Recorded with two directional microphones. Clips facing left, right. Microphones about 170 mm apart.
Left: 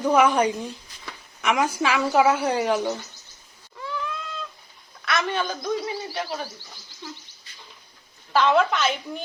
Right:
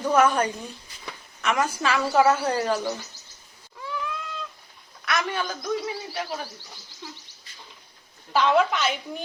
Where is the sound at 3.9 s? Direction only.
10° right (ahead or behind).